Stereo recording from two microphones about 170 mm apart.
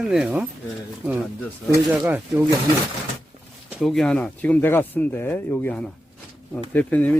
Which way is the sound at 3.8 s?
5° left (ahead or behind).